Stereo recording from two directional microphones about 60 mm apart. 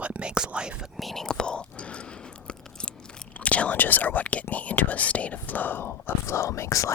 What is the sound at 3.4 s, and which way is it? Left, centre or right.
Whispering, left.